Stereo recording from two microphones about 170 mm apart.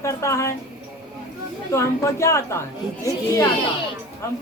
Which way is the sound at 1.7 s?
15° left (ahead or behind).